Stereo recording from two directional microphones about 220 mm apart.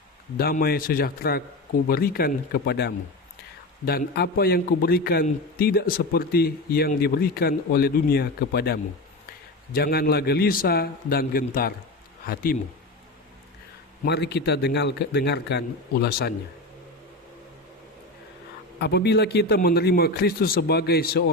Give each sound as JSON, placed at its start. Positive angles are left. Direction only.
{"t": 0.4, "sound": "a man's voice", "side_deg": 40}
{"t": 14.0, "sound": "a man's voice", "side_deg": 50}
{"t": 18.8, "sound": "a man's voice", "side_deg": 50}